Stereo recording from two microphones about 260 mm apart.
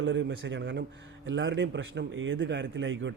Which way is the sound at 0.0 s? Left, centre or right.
Right.